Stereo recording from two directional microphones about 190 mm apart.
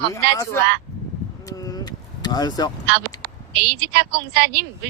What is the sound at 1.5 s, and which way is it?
Vehicle, 20° left (ahead or behind).